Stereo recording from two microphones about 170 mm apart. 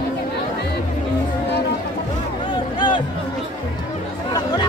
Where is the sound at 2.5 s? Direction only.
25° left (ahead or behind).